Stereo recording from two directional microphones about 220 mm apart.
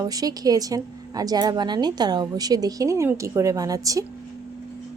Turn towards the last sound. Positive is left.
turn(degrees=-15)  # may be behind; listen again after turning